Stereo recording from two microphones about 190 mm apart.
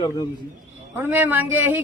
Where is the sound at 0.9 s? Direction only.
10° right (ahead or behind).